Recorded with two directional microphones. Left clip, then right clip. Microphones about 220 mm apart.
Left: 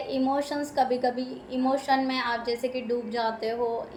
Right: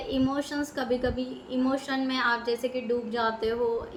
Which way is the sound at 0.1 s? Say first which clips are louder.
Left 2 dB; 10° right (ahead or behind).